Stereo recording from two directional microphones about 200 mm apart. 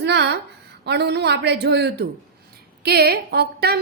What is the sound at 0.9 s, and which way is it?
A woman's voice, 55° right (ahead or behind).